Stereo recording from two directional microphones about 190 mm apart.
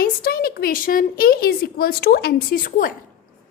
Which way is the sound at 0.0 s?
50° left (ahead or behind).